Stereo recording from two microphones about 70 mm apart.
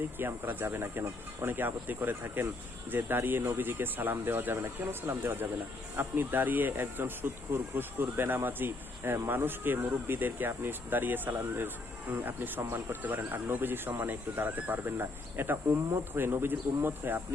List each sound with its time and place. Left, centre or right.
0.2 s speech: right